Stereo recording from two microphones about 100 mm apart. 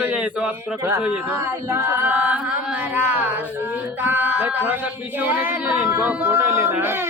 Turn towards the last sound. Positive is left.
turn(degrees=-25)  # may be behind; listen again after turning